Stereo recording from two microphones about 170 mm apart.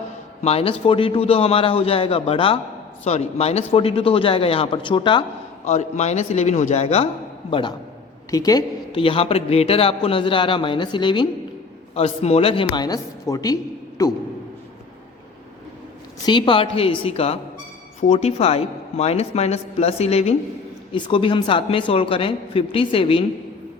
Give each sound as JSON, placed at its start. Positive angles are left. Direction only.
{"t": 0.4, "sound": "a man's voice", "side_deg": 35}
{"t": 5.6, "sound": "a man's voice", "side_deg": 40}
{"t": 8.3, "sound": "a man's voice", "side_deg": 20}
{"t": 16.2, "sound": "a man's voice", "side_deg": 30}